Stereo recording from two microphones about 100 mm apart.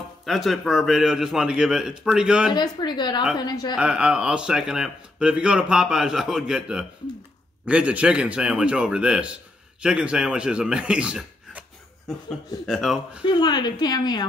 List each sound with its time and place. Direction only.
0.2 s a man's voice: centre (ahead or behind)
2.5 s a woman's voice: 45° left (ahead or behind)
3.7 s speech: 10° right (ahead or behind)
12.6 s a man's voice: centre (ahead or behind)
13.2 s a woman's voice: 45° left (ahead or behind)